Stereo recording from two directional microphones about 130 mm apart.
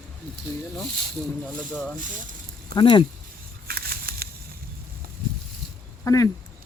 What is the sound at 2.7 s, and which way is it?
Speech, 35° left (ahead or behind).